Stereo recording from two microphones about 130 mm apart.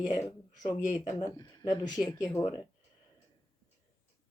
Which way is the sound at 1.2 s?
30° left (ahead or behind).